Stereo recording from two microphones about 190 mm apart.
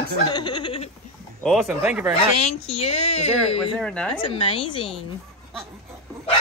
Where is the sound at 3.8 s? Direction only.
5° left (ahead or behind).